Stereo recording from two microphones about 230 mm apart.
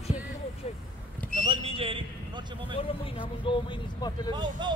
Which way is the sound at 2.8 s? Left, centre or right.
Left.